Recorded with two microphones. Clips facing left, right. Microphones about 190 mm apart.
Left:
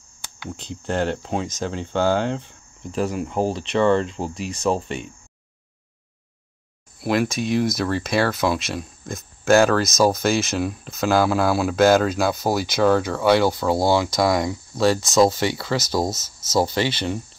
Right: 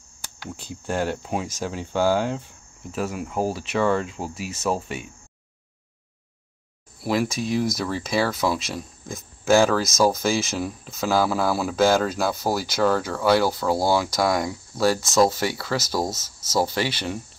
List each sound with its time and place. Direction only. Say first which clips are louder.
0.6 s speech: left 2 dB; 10° right (ahead or behind)
7.0 s speech: left 2 dB; 5° right (ahead or behind)